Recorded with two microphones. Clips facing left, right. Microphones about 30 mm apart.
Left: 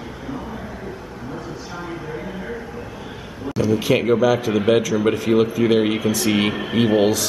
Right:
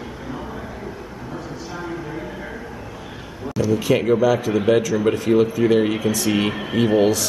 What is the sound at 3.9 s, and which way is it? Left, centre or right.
Speech, centre.